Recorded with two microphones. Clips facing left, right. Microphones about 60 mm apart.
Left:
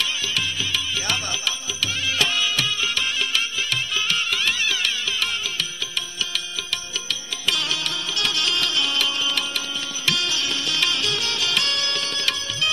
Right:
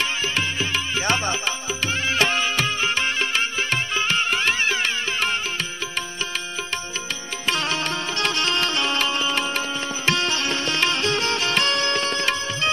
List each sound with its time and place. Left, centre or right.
0.0 s music: right
7.4 s music: right